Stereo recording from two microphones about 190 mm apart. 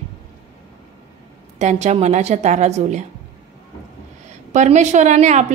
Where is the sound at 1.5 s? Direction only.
35° right (ahead or behind).